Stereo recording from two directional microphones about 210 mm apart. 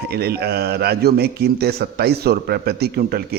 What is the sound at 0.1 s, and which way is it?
A man's voice, 50° right (ahead or behind).